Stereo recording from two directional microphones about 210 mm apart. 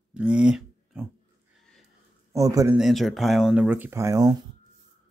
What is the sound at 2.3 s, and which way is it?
Mantra, 15° right (ahead or behind).